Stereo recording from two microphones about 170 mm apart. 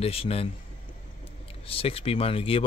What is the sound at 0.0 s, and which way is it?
Speech, 35° left (ahead or behind).